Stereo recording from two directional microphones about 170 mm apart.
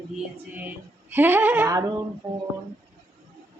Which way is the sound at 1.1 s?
10° right (ahead or behind).